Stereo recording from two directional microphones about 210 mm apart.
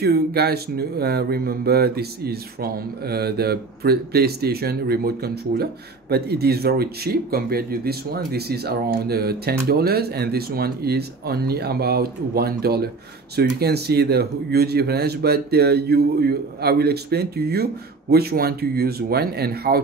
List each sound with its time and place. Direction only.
0.0 s speech: 50° right (ahead or behind)